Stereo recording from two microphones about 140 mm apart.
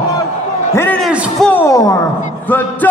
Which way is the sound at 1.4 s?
10° left (ahead or behind).